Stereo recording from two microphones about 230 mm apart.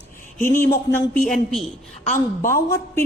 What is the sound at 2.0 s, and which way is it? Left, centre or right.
Speech, left.